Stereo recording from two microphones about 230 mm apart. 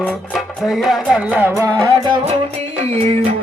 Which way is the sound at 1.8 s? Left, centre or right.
Right.